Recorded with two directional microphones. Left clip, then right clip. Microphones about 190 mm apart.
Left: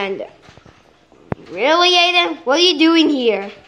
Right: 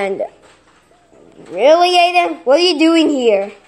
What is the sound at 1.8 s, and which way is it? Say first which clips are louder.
Speech: right 2 dB; 40° left (ahead or behind).